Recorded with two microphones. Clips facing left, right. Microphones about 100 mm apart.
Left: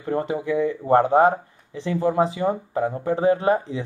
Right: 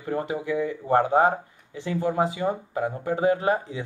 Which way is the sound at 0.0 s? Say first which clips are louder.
Left 3 dB; 35° left (ahead or behind).